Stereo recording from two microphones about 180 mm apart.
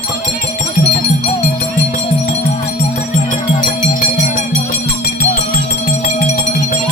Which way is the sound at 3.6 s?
45° left (ahead or behind).